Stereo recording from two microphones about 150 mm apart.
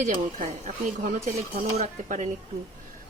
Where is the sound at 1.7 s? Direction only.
50° right (ahead or behind).